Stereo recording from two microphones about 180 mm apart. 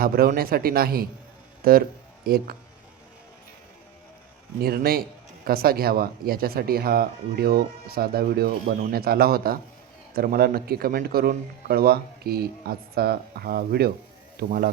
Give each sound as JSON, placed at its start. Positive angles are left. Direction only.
{"t": 0.0, "sound": "speech", "side_deg": -55}
{"t": 4.6, "sound": "speech", "side_deg": -55}